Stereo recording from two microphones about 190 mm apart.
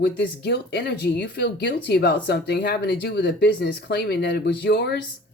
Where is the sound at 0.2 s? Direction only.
55° left (ahead or behind).